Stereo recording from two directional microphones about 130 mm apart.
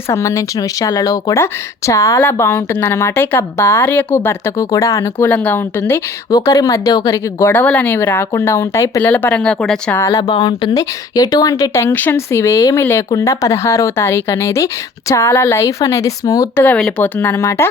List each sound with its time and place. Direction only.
0.1 s speech: 25° left (ahead or behind)
5.3 s speech: 15° left (ahead or behind)
5.8 s speech: 25° left (ahead or behind)
9.0 s speech: 15° left (ahead or behind)
10.0 s speech: 30° left (ahead or behind)
16.6 s speech: 10° left (ahead or behind)